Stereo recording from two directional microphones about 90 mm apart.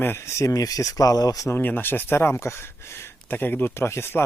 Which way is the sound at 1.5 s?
20° left (ahead or behind).